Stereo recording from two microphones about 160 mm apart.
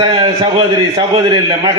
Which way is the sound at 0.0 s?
30° right (ahead or behind).